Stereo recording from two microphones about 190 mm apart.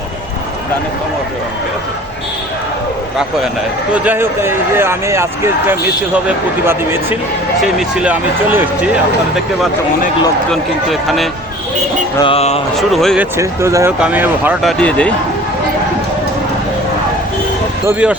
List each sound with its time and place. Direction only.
3.9 s speech: 10° right (ahead or behind)
10.5 s speech: centre (ahead or behind)
12.2 s music: 30° left (ahead or behind)
12.7 s speech: centre (ahead or behind)
13.3 s speech: 15° right (ahead or behind); by 15.1 s 5° left (ahead or behind)
17.8 s speech: 10° right (ahead or behind)